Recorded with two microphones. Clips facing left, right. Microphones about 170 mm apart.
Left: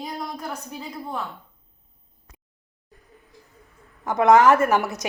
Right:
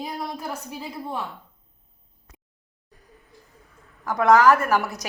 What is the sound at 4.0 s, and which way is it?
A woman's voice, 20° left (ahead or behind).